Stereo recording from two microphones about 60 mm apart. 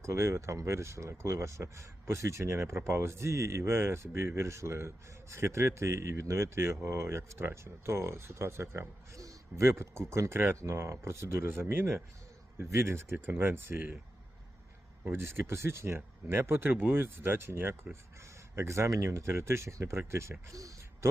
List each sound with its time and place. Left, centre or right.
0.0 s a man's voice: right
13.1 s speech: right
15.0 s speech: right
20.5 s speech: right
21.0 s speech: right